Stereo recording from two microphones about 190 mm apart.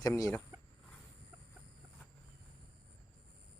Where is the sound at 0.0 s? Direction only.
20° left (ahead or behind).